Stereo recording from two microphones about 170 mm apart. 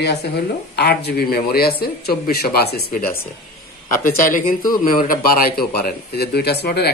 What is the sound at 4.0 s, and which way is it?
A man's voice, 55° left (ahead or behind).